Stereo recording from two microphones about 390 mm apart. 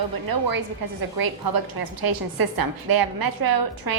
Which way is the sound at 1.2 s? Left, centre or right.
Right.